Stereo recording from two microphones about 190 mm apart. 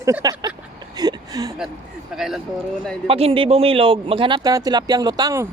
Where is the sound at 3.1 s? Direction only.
30° right (ahead or behind).